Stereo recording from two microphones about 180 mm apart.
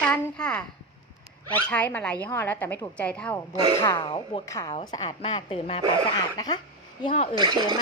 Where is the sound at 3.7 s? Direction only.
20° left (ahead or behind).